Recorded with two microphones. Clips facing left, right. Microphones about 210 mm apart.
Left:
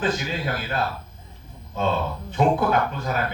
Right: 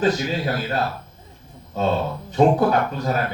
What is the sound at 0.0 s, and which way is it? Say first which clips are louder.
A man's voice: right 5 dB; 40° right (ahead or behind).